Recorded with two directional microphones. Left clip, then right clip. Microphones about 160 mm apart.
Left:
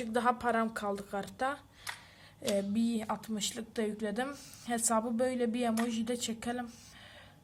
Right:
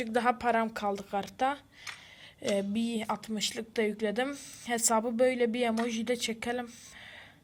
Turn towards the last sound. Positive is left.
turn(degrees=-20)  # may be behind; listen again after turning